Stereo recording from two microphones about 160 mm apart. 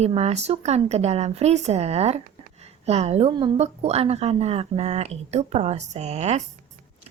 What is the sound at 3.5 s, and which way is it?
A woman's voice, 40° right (ahead or behind).